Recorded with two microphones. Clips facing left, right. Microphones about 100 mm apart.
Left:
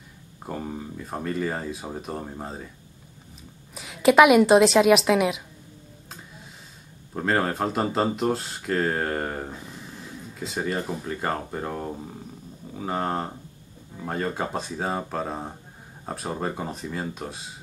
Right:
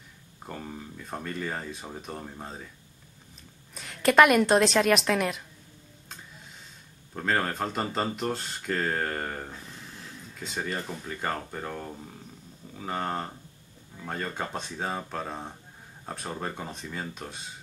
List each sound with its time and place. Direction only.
0.5 s speech: 10° left (ahead or behind)
3.7 s a woman's voice: 5° left (ahead or behind)
7.2 s a woman's voice: 10° left (ahead or behind)
9.5 s a sound: 20° left (ahead or behind)
10.4 s speech: 5° left (ahead or behind); by 12.2 s 20° left (ahead or behind)
12.7 s a woman's voice: 5° left (ahead or behind)